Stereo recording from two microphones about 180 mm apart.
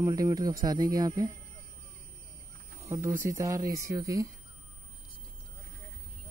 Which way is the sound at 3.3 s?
20° right (ahead or behind).